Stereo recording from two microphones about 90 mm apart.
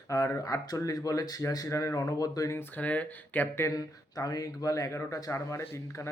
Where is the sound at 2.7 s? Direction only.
20° left (ahead or behind).